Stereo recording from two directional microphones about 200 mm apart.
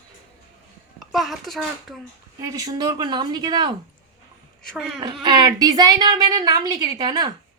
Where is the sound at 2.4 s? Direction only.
20° right (ahead or behind).